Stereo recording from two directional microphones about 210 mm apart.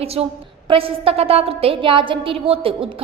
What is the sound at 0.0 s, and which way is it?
A woman's voice, 30° right (ahead or behind).